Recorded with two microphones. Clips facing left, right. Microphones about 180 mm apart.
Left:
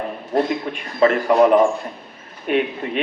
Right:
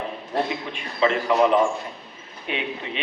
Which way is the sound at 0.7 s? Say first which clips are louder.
Left 5 dB; 50° left (ahead or behind).